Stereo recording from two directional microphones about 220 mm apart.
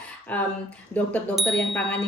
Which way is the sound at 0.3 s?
5° left (ahead or behind).